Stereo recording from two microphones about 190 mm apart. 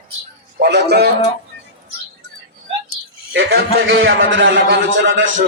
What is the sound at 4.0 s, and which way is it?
Speech, 90° right.